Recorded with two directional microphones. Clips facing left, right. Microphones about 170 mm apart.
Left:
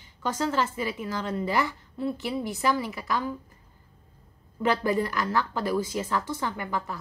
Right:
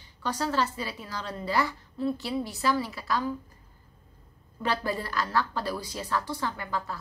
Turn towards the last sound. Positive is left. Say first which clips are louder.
# left 2 dB
turn(degrees=15)  # may be behind; listen again after turning